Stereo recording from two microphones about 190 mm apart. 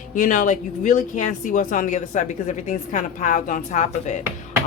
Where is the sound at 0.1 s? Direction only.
45° left (ahead or behind).